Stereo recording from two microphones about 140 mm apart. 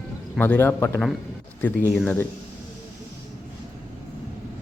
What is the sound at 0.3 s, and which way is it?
A man's voice, 15° left (ahead or behind).